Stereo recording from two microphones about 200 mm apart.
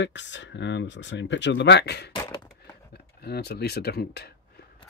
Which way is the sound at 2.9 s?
55° left (ahead or behind).